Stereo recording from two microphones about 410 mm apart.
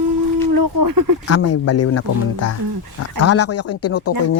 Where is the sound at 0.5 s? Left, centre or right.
Right.